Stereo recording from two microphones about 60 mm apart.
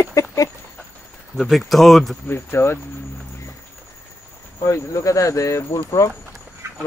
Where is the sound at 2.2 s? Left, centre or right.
Left.